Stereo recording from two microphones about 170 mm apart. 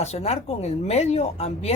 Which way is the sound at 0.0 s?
40° left (ahead or behind).